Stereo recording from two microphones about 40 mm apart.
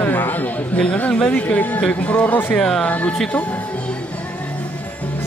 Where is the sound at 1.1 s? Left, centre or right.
Left.